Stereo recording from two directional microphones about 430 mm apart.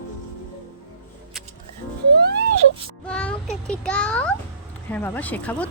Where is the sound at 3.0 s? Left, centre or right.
Centre.